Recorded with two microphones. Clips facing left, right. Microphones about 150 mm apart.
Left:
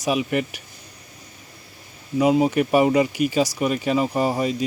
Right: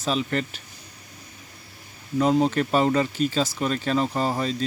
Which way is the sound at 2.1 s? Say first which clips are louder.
Left 3 dB; 10° left (ahead or behind).